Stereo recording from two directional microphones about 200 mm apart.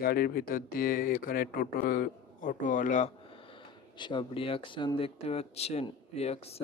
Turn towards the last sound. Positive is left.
turn(degrees=30)  # may be behind; listen again after turning